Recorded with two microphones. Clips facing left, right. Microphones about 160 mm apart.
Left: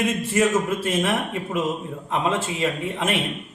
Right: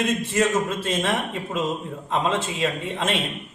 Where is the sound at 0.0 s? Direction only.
5° left (ahead or behind).